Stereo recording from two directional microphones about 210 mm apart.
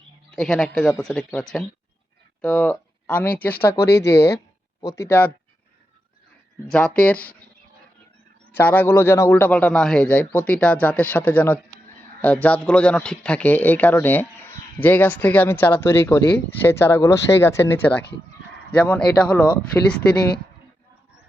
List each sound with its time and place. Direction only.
0.3 s speech: centre (ahead or behind)
6.7 s speech: 5° left (ahead or behind)
8.5 s speech: 10° left (ahead or behind)